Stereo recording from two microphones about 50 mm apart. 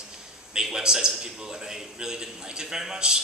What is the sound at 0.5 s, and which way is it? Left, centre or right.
A man's voice, centre.